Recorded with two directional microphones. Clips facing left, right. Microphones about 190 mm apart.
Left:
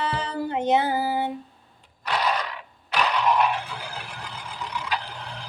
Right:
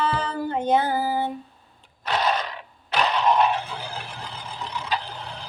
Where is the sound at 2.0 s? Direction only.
25° right (ahead or behind).